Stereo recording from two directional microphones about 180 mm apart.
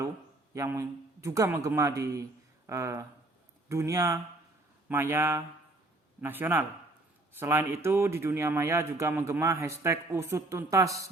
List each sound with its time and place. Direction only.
0.5 s speech: 15° right (ahead or behind)